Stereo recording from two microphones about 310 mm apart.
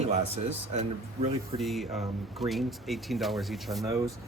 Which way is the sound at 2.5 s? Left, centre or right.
Centre.